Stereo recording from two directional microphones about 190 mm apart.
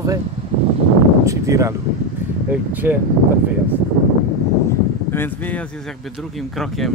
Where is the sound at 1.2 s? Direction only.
15° right (ahead or behind).